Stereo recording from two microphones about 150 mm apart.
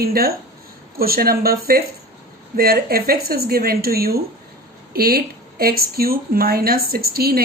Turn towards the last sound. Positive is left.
turn(degrees=-90)